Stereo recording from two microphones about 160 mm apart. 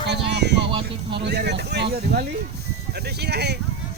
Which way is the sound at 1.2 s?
90° right.